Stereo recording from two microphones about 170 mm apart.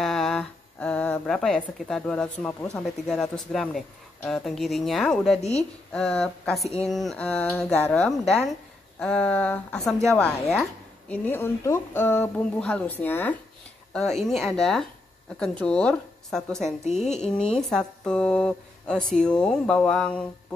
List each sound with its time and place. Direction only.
0.0 s speech: centre (ahead or behind)
5.4 s a woman's voice: 40° left (ahead or behind)
5.9 s a woman's voice: 5° left (ahead or behind)
16.8 s a woman's voice: 40° left (ahead or behind)
17.2 s a woman's voice: 5° left (ahead or behind)